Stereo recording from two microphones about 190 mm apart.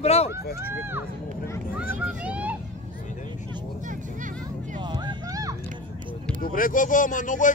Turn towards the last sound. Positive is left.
turn(degrees=45)  # may be behind; listen again after turning